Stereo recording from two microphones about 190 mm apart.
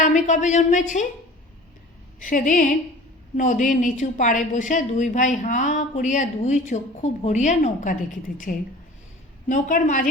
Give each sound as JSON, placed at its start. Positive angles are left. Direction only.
{"t": 0.0, "sound": "a woman's voice", "side_deg": 40}
{"t": 2.2, "sound": "a woman's voice", "side_deg": 45}